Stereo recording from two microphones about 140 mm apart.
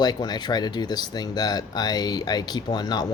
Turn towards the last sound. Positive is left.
turn(degrees=30)  # may be behind; listen again after turning